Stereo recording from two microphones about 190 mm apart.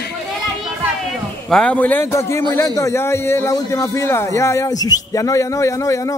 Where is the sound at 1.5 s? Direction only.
5° left (ahead or behind).